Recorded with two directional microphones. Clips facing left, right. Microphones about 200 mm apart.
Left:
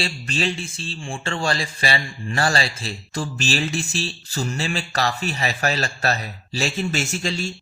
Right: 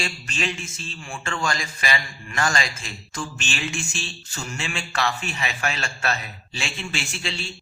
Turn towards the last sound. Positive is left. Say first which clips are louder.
# left 7 dB
turn(degrees=40)  # may be behind; listen again after turning